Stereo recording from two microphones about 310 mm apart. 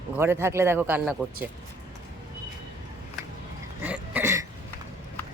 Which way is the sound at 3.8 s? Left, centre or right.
Centre.